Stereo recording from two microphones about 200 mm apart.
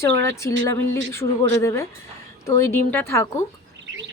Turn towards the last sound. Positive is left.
turn(degrees=15)  # may be behind; listen again after turning